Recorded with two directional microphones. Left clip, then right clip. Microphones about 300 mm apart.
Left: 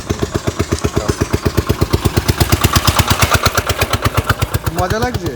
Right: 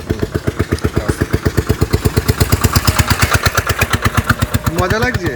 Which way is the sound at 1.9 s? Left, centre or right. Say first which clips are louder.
Left 1 dB; left.